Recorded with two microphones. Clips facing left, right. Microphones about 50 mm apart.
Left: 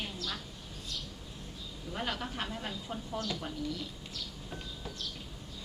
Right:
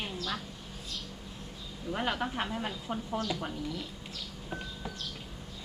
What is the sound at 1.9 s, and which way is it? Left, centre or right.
A woman's voice, right.